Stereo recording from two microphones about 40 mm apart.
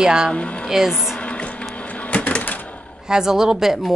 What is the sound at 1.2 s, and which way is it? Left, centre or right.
Music, left.